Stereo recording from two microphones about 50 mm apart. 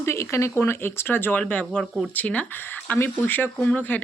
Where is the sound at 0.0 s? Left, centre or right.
Left.